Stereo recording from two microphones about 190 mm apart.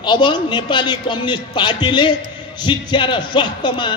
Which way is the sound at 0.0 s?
25° left (ahead or behind).